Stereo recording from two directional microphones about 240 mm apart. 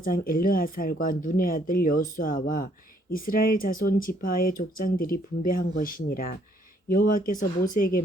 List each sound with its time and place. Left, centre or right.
0.0 s speech: left